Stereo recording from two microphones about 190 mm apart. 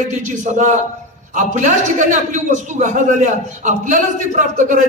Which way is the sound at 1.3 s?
40° right (ahead or behind).